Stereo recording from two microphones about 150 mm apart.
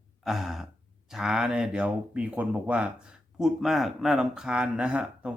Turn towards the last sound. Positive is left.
turn(degrees=-10)  # may be behind; listen again after turning